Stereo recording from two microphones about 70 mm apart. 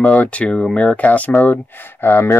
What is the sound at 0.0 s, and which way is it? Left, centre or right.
Speech, left.